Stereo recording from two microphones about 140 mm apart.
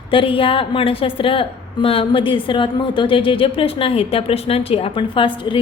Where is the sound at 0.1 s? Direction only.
40° left (ahead or behind).